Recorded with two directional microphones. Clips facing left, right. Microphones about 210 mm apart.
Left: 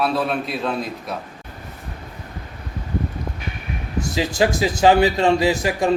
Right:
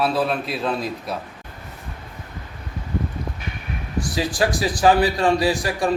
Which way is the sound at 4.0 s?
25° left (ahead or behind).